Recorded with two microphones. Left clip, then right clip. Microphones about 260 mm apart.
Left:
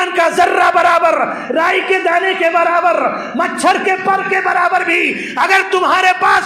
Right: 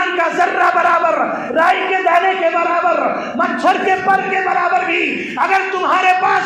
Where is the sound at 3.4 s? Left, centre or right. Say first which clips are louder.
Left 1 dB; left.